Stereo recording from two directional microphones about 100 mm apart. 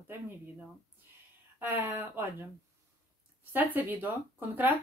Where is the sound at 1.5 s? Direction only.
20° right (ahead or behind).